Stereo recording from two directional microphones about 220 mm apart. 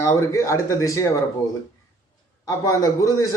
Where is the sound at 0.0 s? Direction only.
15° left (ahead or behind).